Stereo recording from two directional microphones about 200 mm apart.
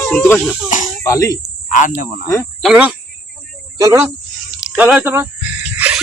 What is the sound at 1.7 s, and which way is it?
Speech, 40° left (ahead or behind).